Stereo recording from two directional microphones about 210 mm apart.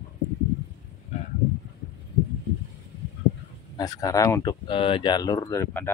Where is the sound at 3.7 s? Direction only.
15° left (ahead or behind).